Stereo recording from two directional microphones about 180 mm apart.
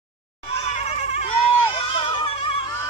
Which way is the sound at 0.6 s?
30° left (ahead or behind).